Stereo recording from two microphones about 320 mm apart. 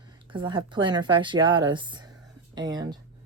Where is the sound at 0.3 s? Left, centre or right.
Centre.